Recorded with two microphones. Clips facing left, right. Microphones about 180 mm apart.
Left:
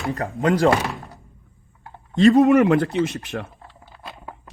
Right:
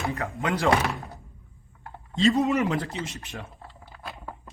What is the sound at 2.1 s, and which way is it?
A man's voice, 60° left (ahead or behind).